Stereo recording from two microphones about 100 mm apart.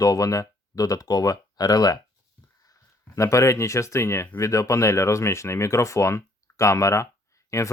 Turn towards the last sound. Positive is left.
turn(degrees=30)  # may be behind; listen again after turning